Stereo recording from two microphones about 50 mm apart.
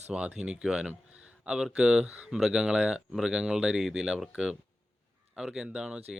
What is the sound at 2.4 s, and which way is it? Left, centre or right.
Speech, centre.